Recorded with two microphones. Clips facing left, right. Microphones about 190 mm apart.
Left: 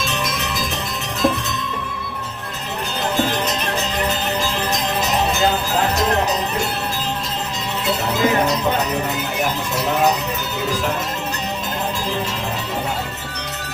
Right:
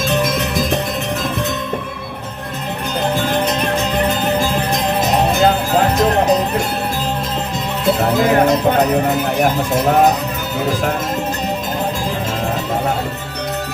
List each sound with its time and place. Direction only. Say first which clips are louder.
0.0 s music: right 7 dB; 50° right (ahead or behind)
5.0 s music: right 5 dB; 50° right (ahead or behind)
8.0 s speech: right 4 dB; 55° right (ahead or behind)